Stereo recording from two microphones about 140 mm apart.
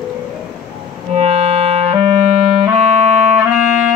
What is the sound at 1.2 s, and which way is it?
Music, 50° right (ahead or behind).